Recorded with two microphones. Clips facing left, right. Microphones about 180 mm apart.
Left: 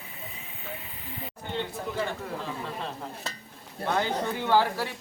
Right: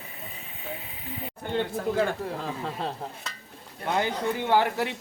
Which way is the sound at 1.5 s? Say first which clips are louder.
Right 6 dB; 50° right (ahead or behind).